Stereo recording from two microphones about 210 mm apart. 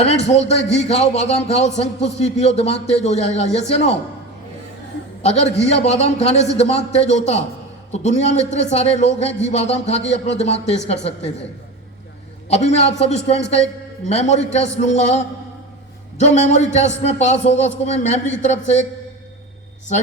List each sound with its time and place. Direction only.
0.0 s a man's voice: 30° left (ahead or behind)
5.2 s a man's voice: 30° left (ahead or behind)
12.5 s a man's voice: 30° left (ahead or behind)